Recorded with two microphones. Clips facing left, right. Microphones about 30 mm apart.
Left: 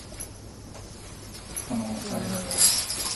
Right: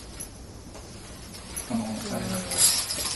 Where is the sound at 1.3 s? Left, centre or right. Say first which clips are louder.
Right 1 dB; right.